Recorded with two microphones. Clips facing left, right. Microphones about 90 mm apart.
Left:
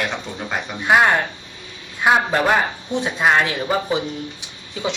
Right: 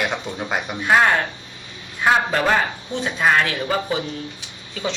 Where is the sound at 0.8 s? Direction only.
20° left (ahead or behind).